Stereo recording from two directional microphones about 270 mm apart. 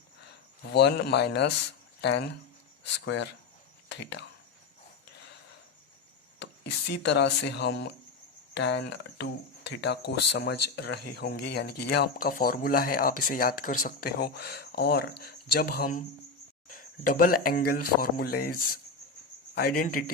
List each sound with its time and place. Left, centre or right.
0.2 s speech: left
6.4 s speech: left